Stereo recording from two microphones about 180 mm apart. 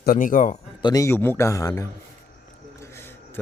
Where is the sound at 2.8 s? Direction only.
15° left (ahead or behind).